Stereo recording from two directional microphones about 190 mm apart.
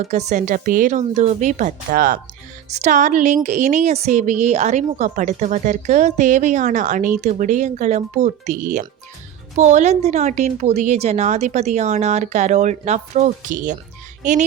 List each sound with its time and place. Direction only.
0.0 s music: 35° right (ahead or behind)